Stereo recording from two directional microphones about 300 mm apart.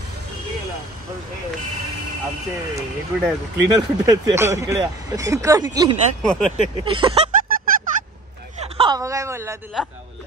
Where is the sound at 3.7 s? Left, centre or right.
Centre.